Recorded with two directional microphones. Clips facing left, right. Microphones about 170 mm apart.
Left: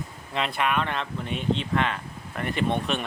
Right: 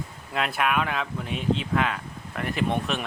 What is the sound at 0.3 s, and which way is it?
A man's voice, 5° right (ahead or behind).